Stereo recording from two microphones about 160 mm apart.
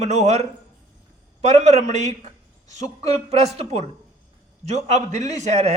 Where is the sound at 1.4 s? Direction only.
45° right (ahead or behind).